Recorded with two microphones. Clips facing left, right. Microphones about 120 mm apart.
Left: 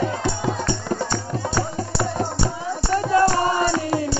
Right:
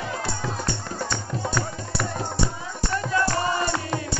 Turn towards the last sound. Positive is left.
turn(degrees=35)  # may be behind; listen again after turning